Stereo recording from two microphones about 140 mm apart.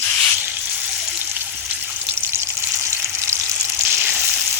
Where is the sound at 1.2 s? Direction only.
10° right (ahead or behind).